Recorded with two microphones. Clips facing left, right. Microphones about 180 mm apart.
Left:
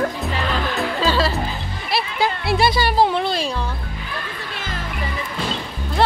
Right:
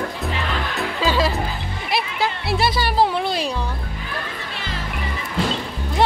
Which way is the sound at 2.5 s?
Centre (ahead or behind).